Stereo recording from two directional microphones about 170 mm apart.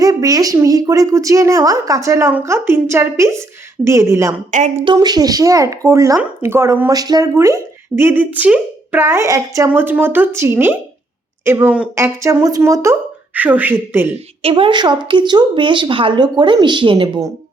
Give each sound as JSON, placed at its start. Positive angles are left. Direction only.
{"t": 0.0, "sound": "a woman's voice", "side_deg": -20}
{"t": 14.4, "sound": "speech", "side_deg": -30}